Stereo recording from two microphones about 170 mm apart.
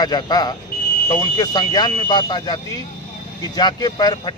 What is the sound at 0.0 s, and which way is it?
Speech, 25° left (ahead or behind).